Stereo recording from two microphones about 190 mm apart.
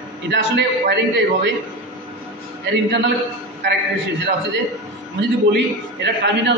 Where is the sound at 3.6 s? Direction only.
70° right (ahead or behind).